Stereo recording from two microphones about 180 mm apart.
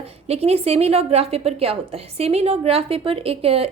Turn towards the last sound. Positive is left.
turn(degrees=-35)  # may be behind; listen again after turning